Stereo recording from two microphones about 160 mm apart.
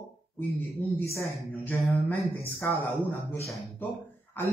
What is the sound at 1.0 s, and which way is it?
Speech, 15° left (ahead or behind).